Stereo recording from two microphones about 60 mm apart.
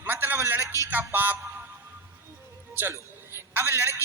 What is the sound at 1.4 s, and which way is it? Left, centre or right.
Music, right.